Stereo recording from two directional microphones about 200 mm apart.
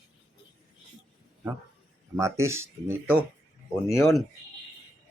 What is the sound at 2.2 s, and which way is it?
Speech, 15° right (ahead or behind).